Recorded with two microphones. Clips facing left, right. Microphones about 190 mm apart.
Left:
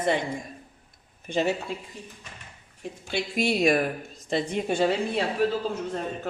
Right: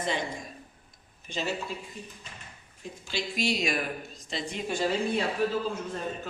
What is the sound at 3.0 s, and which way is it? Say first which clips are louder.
Speech: left 4 dB; 60° left (ahead or behind).